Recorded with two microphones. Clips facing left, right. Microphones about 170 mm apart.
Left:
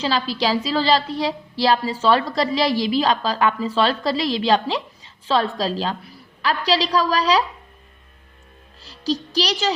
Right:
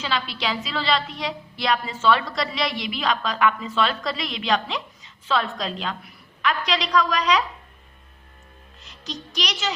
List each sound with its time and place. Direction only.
0.0 s a woman's voice: 35° left (ahead or behind)
8.8 s a woman's voice: 35° left (ahead or behind)